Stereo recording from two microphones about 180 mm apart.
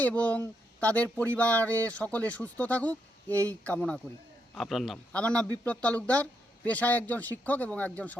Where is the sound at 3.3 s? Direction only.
15° right (ahead or behind).